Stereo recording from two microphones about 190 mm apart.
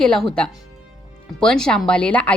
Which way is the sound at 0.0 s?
5° left (ahead or behind).